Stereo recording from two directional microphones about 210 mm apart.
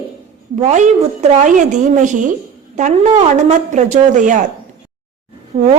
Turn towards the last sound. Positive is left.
turn(degrees=-45)  # may be behind; listen again after turning